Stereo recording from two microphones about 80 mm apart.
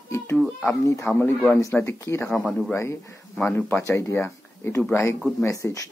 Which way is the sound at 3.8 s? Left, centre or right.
Left.